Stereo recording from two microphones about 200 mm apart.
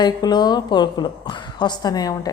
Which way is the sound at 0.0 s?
20° left (ahead or behind).